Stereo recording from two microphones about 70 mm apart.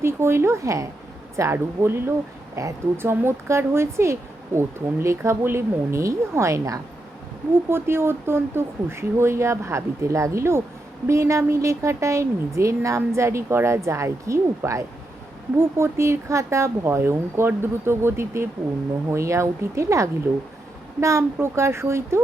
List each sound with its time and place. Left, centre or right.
0.0 s speech: right
1.4 s speech: right
2.6 s a woman's voice: right
3.0 s speech: right
7.7 s a woman's voice: right